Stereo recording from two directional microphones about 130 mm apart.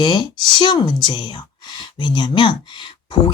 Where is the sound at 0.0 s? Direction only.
35° left (ahead or behind).